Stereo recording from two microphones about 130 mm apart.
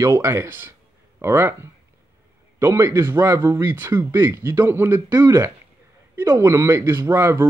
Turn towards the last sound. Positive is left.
turn(degrees=-20)  # may be behind; listen again after turning